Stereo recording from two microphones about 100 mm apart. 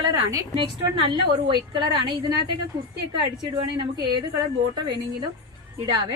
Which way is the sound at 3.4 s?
45° right (ahead or behind).